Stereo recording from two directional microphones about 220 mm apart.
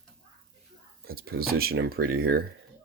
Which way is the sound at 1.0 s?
45° right (ahead or behind).